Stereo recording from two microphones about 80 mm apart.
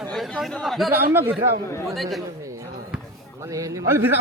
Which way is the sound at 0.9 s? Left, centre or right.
Right.